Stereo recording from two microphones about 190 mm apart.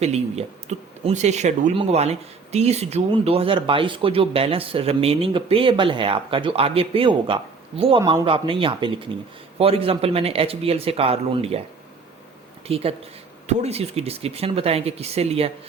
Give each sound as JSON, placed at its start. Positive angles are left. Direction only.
{"t": 0.0, "sound": "a man's voice", "side_deg": -35}
{"t": 12.6, "sound": "a man's voice", "side_deg": -30}